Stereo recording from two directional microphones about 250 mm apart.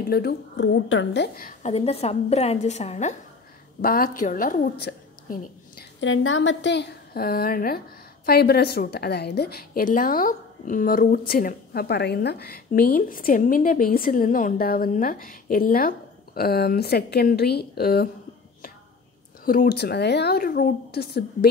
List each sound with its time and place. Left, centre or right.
0.1 s a woman's voice: left
19.4 s a woman's voice: left